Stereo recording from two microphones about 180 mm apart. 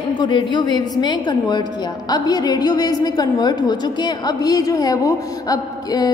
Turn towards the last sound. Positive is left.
turn(degrees=20)  # may be behind; listen again after turning